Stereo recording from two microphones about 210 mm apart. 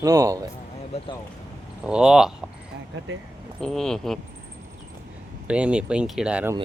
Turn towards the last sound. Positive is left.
turn(degrees=-5)  # may be behind; listen again after turning